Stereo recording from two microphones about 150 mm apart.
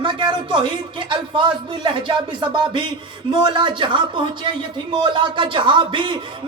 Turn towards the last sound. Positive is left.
turn(degrees=-30)  # may be behind; listen again after turning